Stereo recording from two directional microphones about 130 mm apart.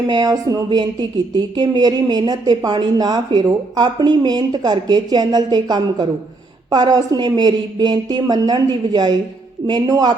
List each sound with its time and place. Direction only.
0.1 s a woman's voice: 30° right (ahead or behind)